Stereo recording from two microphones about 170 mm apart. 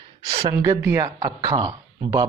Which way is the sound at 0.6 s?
15° right (ahead or behind).